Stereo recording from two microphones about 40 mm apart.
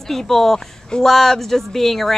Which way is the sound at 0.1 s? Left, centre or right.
Centre.